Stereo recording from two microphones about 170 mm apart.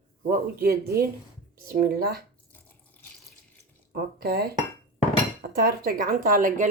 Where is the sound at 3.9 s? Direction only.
65° right (ahead or behind).